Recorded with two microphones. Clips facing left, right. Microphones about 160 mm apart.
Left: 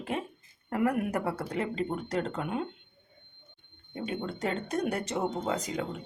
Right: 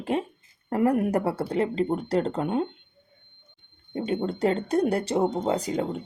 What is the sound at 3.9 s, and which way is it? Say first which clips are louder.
Speech: right 7 dB; 30° right (ahead or behind).